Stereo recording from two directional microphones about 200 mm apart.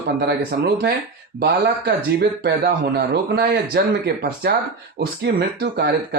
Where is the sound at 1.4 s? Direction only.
55° right (ahead or behind).